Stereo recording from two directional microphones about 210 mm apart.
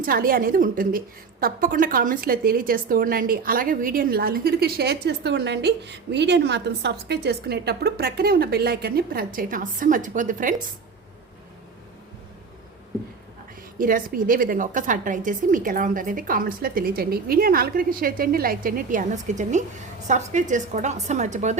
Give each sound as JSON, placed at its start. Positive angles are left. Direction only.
{"t": 0.0, "sound": "a woman's voice", "side_deg": -45}
{"t": 13.7, "sound": "a woman's voice", "side_deg": -40}